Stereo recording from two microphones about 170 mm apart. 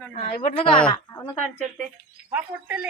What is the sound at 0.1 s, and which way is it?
Speech, 45° left (ahead or behind).